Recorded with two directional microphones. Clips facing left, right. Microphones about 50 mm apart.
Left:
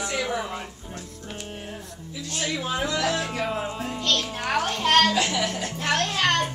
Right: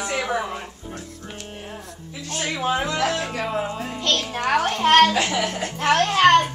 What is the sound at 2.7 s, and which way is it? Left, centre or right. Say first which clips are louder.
Speech: right 4 dB; right.